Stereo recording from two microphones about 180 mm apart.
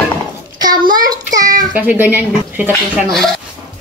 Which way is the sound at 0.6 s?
25° right (ahead or behind).